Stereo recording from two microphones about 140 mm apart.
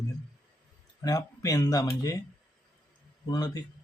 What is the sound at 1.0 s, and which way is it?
Speech, 25° left (ahead or behind).